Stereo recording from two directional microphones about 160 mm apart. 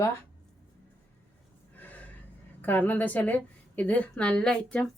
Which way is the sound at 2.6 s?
10° left (ahead or behind).